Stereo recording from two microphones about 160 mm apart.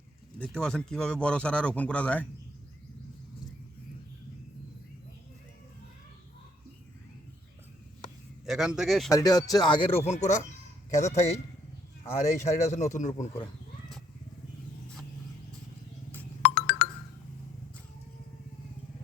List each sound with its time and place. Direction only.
0.3 s speech: 5° left (ahead or behind)
8.4 s speech: 5° right (ahead or behind)
9.1 s a man's voice: 20° left (ahead or behind); by 11.3 s 45° left (ahead or behind)
12.4 s a man's voice: 50° left (ahead or behind)
16.4 s music: 90° left